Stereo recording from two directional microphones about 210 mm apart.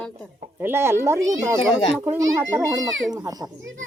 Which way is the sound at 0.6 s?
10° right (ahead or behind).